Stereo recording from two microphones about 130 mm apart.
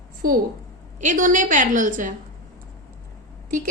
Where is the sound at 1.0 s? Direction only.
80° right.